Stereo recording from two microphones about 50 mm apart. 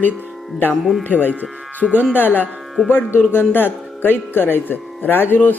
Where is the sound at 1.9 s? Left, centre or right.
Right.